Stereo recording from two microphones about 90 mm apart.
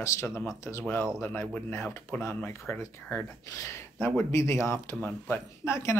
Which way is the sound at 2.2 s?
30° left (ahead or behind).